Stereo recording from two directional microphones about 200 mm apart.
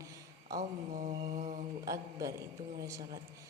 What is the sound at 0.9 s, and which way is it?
Mantra, 35° right (ahead or behind).